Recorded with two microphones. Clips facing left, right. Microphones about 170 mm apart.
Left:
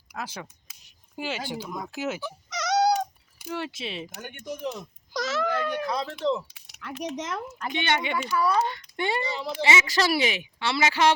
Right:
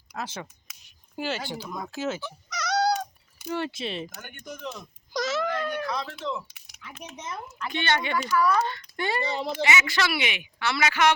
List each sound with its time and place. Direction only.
0.1 s speech: 10° left (ahead or behind)
3.4 s speech: 5° left (ahead or behind)
4.1 s speech: 20° left (ahead or behind)
5.1 s speech: 5° left (ahead or behind)
5.8 s speech: 30° left (ahead or behind)
6.7 s speech: 75° left (ahead or behind); by 7.4 s 90° left
7.7 s speech: 15° left (ahead or behind)
9.2 s speech: 55° right (ahead or behind)
9.6 s a woman's voice: 25° left (ahead or behind)